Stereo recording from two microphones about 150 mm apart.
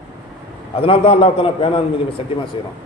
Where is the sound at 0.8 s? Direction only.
40° left (ahead or behind).